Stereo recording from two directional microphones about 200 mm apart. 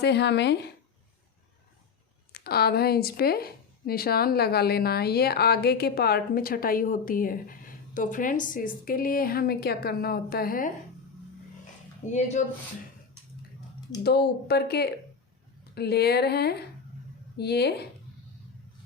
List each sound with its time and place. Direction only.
0.0 s speech: 55° left (ahead or behind)
2.3 s speech: 50° left (ahead or behind)
12.0 s speech: 35° left (ahead or behind)
14.0 s speech: 55° left (ahead or behind)